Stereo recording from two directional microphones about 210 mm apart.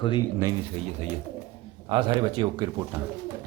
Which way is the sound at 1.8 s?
25° right (ahead or behind).